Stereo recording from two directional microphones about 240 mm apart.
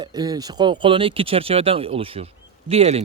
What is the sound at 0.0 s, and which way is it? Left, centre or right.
A man's voice, centre.